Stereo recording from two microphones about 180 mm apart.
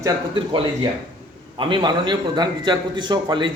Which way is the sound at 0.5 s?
25° right (ahead or behind).